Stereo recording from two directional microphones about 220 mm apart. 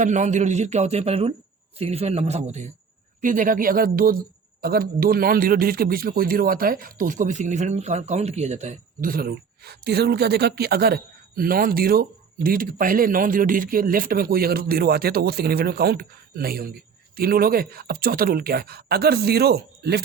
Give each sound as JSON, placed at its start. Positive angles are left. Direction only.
{"t": 0.0, "sound": "a man's voice", "side_deg": -35}